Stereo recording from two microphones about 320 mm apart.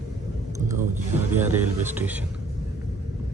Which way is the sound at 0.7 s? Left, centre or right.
Centre.